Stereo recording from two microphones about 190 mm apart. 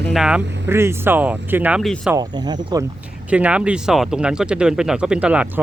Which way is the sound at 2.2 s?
20° right (ahead or behind).